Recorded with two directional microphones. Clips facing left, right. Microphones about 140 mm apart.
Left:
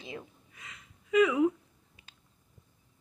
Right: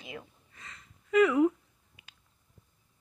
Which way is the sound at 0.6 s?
10° left (ahead or behind).